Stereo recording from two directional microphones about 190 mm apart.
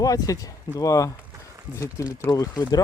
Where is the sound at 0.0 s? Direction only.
20° left (ahead or behind).